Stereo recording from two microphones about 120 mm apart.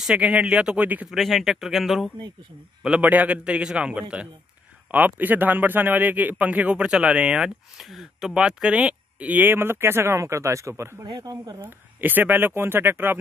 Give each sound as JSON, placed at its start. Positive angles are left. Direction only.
{"t": 0.0, "sound": "a man's voice", "side_deg": -10}
{"t": 1.1, "sound": "a man's voice", "side_deg": 0}
{"t": 11.6, "sound": "a man's voice", "side_deg": -15}